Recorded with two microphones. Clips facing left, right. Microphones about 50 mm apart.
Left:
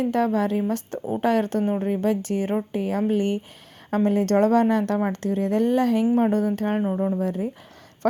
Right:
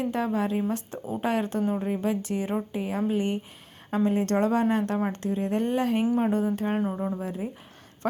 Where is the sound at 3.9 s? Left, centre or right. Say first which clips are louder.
Left 4 dB; left.